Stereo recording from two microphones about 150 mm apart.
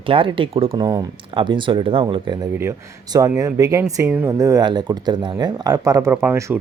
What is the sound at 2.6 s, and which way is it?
Speech, 20° right (ahead or behind).